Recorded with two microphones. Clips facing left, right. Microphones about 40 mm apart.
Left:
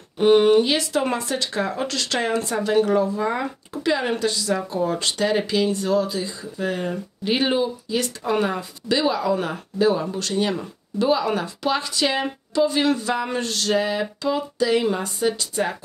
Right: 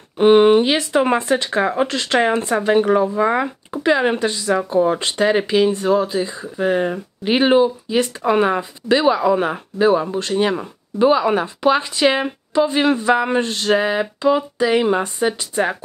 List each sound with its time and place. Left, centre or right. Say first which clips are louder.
0.2 s speech: right 4 dB; right
3.2 s speech: right 7 dB; right
3.7 s speech: right 6 dB; right